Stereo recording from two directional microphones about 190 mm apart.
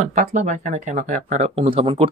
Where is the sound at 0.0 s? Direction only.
40° right (ahead or behind).